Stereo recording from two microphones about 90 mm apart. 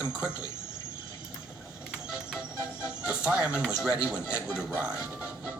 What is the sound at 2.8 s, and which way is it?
Speech, 15° right (ahead or behind).